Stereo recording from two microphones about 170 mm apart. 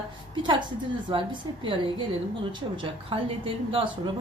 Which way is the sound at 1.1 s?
30° right (ahead or behind).